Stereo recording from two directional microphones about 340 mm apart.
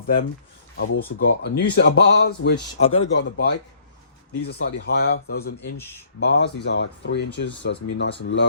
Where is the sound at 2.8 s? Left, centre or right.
Centre.